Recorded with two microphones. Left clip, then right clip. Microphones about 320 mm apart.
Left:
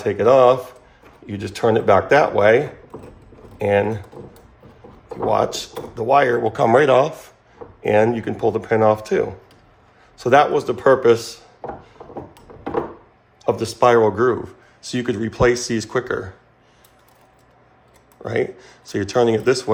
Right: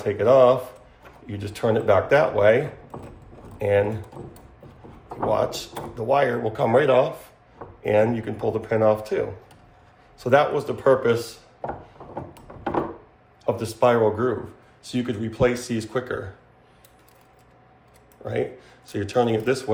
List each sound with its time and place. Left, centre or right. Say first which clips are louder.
0.0 s speech: left 3 dB; left
5.3 s speech: left 4 dB; left
13.4 s speech: left 4 dB; left
18.3 s speech: left 5 dB; left